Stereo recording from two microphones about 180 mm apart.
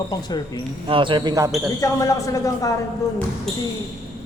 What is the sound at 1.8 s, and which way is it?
Speech, 20° left (ahead or behind).